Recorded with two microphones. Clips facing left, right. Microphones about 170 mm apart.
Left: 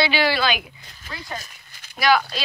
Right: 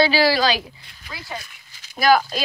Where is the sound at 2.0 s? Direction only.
40° right (ahead or behind).